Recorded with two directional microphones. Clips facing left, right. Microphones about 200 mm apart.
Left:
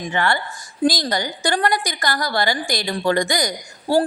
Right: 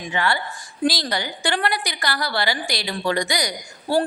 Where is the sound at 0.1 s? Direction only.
50° left (ahead or behind).